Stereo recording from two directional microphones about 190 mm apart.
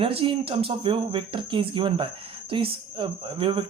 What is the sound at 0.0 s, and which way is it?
Speech, 30° right (ahead or behind).